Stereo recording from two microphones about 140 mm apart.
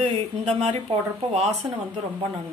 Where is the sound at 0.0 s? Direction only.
45° right (ahead or behind).